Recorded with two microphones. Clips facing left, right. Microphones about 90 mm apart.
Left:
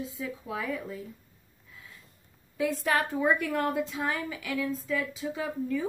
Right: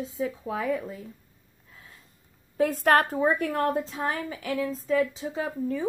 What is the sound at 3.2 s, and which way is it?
A woman's voice, 35° right (ahead or behind).